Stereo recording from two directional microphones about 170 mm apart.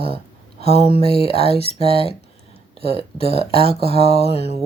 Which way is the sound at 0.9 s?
40° left (ahead or behind).